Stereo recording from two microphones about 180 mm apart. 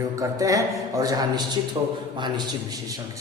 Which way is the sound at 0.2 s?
20° right (ahead or behind).